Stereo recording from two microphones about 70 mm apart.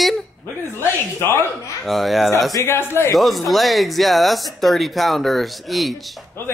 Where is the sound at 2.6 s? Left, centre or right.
Left.